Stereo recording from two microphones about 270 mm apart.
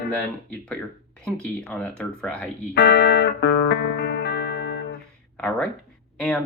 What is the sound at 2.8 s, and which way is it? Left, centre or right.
Music, left.